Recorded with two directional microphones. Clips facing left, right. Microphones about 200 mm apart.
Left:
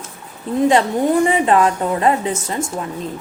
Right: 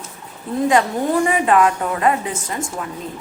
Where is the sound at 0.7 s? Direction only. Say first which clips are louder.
Left 1 dB; 25° left (ahead or behind).